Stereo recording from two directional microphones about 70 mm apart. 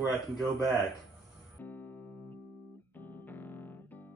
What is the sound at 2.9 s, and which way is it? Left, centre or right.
Music, left.